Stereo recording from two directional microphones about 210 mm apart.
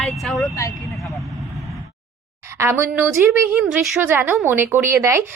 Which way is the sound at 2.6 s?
10° right (ahead or behind).